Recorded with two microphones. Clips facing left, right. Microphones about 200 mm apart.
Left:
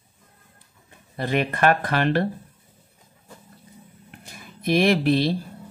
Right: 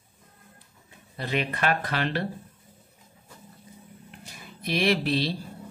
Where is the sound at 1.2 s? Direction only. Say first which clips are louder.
Left 6 dB; 50° left (ahead or behind).